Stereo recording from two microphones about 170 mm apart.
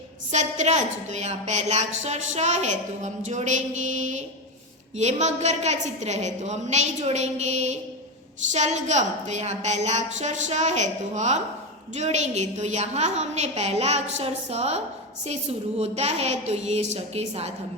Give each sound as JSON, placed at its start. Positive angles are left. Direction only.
{"t": 0.3, "sound": "a woman's voice", "side_deg": -40}